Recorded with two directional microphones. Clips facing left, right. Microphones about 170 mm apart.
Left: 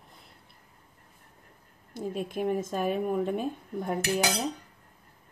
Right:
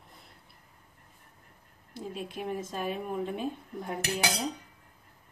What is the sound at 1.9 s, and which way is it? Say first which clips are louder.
Speech: left 6 dB; 45° left (ahead or behind).